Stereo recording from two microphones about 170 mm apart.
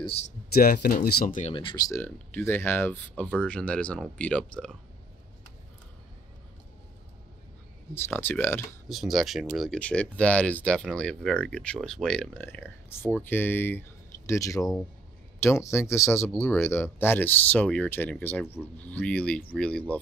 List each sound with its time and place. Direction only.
0.5 s speech: 65° left (ahead or behind)
1.5 s speech: 30° left (ahead or behind)
1.9 s speech: 10° left (ahead or behind)
7.9 s speech: 10° left (ahead or behind)
8.8 s speech: centre (ahead or behind)